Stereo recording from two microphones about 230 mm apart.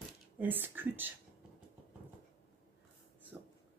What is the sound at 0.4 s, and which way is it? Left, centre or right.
Speech, centre.